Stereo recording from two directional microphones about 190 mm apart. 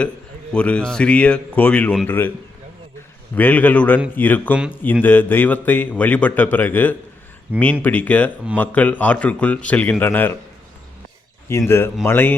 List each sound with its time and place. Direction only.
0.5 s a man's voice: 5° left (ahead or behind)
3.3 s a man's voice: 10° left (ahead or behind)
11.5 s a man's voice: 15° left (ahead or behind)